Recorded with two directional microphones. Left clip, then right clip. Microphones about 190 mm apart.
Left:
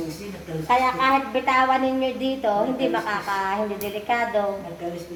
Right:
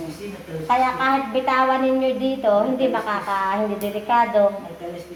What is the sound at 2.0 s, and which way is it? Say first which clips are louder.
A woman's voice: right 3 dB; 15° right (ahead or behind).